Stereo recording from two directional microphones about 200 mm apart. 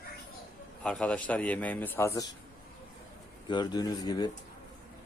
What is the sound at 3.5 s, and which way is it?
Speech, 20° left (ahead or behind).